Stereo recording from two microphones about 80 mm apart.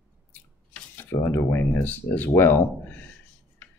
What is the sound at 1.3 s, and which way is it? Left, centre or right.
Speech, left.